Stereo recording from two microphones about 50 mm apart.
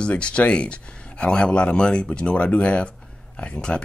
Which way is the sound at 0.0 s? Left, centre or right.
Left.